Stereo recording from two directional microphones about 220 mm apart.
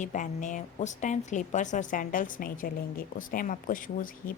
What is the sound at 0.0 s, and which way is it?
Speech, 35° left (ahead or behind).